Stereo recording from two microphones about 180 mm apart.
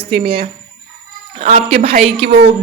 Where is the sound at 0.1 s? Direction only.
30° right (ahead or behind).